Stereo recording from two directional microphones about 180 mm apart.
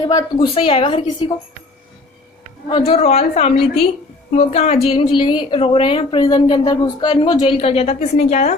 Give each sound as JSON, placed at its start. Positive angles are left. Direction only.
{"t": 0.0, "sound": "a woman's voice", "side_deg": 20}
{"t": 0.4, "sound": "a woman's voice", "side_deg": 30}
{"t": 2.6, "sound": "a woman's voice", "side_deg": 30}